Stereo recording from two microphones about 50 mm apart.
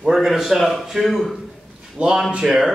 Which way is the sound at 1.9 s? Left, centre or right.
Centre.